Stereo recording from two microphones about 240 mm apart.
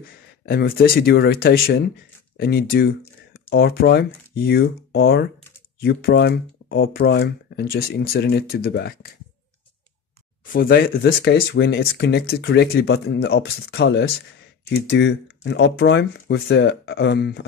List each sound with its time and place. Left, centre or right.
0.5 s speech: left
10.4 s speech: left